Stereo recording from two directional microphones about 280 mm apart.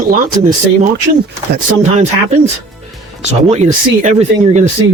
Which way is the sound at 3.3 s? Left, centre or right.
Right.